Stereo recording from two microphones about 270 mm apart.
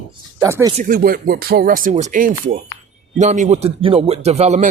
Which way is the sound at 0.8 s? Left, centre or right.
Right.